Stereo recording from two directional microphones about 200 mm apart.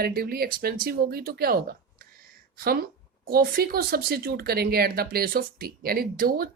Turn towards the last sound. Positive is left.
turn(degrees=-45)  # may be behind; listen again after turning